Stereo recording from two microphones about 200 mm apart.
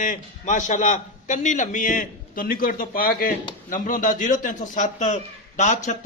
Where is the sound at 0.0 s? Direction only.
40° left (ahead or behind).